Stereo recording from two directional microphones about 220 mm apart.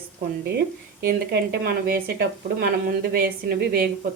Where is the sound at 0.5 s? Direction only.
45° right (ahead or behind).